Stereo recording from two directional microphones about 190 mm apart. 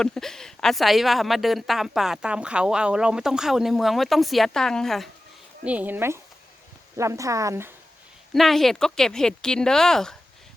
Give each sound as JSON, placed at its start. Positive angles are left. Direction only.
{"t": 0.0, "sound": "speech", "side_deg": 5}
{"t": 8.3, "sound": "speech", "side_deg": 0}